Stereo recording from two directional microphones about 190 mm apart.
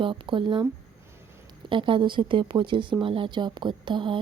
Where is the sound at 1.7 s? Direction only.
25° right (ahead or behind).